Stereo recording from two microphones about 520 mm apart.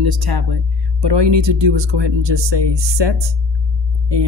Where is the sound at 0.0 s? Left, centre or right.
Right.